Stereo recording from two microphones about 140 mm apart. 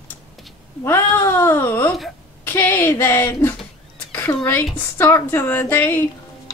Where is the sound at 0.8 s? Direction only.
15° left (ahead or behind).